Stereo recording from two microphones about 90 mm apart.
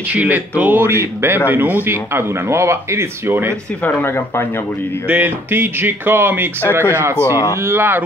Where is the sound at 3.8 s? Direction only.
25° left (ahead or behind).